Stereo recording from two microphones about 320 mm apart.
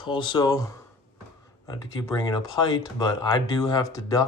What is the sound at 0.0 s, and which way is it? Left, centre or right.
Speech, centre.